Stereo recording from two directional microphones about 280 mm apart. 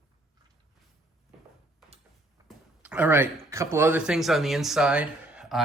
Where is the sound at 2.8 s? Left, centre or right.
Centre.